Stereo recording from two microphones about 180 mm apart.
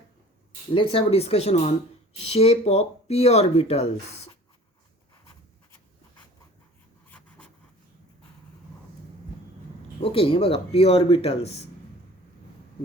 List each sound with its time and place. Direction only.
0.7 s speech: 30° left (ahead or behind)
7.1 s writing: 5° left (ahead or behind)
10.0 s speech: 30° left (ahead or behind)